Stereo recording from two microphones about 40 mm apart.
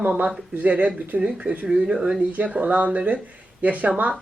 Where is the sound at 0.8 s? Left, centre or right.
Right.